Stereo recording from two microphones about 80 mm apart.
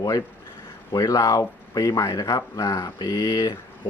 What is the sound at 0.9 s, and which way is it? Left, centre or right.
Speech, left.